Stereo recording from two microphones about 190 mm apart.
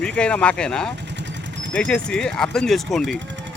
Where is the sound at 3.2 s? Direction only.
75° right (ahead or behind).